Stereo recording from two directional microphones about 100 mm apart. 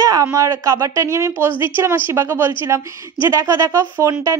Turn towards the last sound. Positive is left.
turn(degrees=-30)  # may be behind; listen again after turning